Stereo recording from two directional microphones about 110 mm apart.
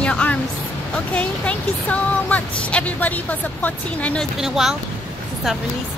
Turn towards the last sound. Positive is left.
turn(degrees=-5)  # may be behind; listen again after turning